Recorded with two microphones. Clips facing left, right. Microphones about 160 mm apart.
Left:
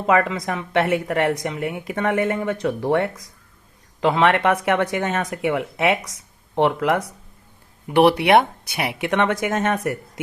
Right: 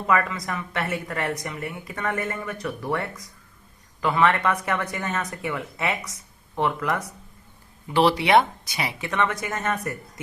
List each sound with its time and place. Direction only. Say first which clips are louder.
0.1 s a woman's voice: left 5 dB; 85° left
4.0 s a woman's voice: left 4 dB; 80° left
6.7 s speech: left 6 dB; 70° left (ahead or behind)
7.9 s speech: left 5 dB; 60° left (ahead or behind); by 10.0 s 85° left